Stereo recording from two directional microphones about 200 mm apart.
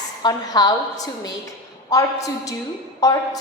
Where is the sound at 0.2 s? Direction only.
20° left (ahead or behind).